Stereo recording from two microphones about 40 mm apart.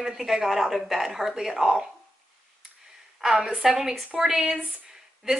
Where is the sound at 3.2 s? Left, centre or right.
Centre.